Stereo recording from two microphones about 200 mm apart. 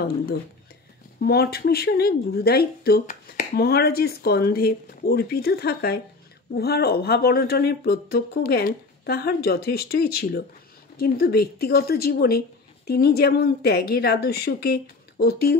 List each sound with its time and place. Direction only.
1.2 s speech: 50° left (ahead or behind)